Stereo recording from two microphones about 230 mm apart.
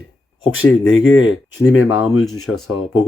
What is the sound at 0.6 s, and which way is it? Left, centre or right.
Speech, left.